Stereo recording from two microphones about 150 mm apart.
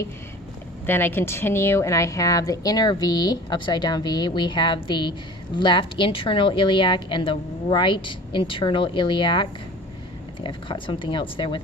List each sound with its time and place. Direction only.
0.9 s a woman's voice: 15° left (ahead or behind); by 11.6 s 35° left (ahead or behind)